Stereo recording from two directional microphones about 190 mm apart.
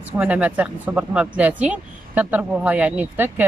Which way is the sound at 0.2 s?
5° right (ahead or behind).